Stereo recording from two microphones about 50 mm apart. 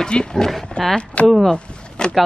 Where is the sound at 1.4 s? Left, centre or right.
Centre.